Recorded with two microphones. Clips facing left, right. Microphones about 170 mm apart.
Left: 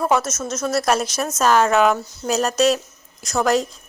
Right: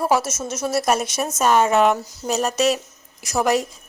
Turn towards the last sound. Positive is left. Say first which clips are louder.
# left 1 dB
turn(degrees=-5)  # may be behind; listen again after turning